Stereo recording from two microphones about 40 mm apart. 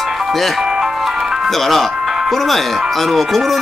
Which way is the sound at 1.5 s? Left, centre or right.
Centre.